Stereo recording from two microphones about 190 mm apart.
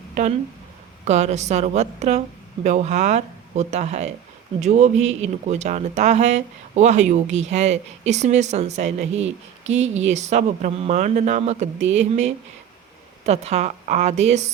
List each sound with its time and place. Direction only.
0.1 s speech: 40° right (ahead or behind)